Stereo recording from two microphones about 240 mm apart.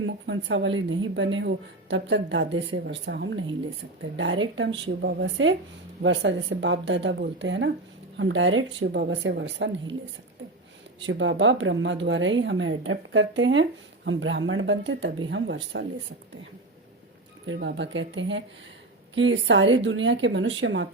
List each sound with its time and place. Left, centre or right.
0.0 s speech: right
11.0 s speech: right
17.4 s speech: right